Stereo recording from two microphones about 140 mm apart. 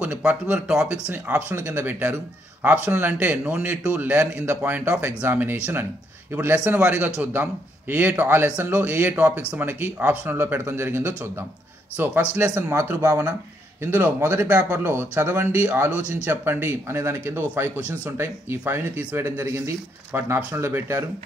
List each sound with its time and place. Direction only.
0.0 s speech: 5° right (ahead or behind)